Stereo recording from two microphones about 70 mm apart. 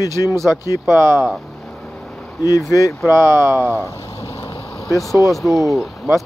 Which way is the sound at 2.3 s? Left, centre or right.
Left.